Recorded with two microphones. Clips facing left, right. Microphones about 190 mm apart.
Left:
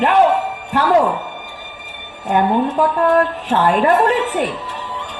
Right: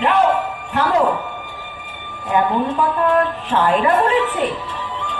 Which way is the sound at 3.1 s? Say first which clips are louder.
Left 2 dB; 45° left (ahead or behind).